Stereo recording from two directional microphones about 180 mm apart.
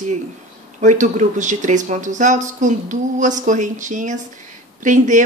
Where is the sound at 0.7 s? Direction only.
45° right (ahead or behind).